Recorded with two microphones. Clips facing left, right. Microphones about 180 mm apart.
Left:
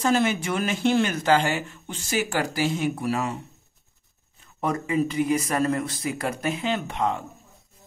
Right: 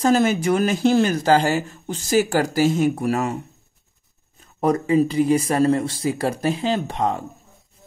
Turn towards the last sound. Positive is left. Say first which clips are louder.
# right 3 dB
turn(degrees=-35)  # may be behind; listen again after turning